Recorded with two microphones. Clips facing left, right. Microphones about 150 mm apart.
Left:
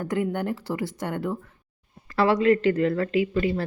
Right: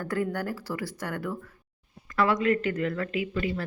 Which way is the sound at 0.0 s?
20° left (ahead or behind).